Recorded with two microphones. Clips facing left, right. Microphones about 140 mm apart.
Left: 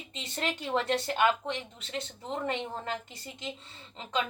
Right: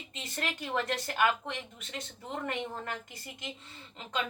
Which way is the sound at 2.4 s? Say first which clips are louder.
Left 2 dB; 25° left (ahead or behind).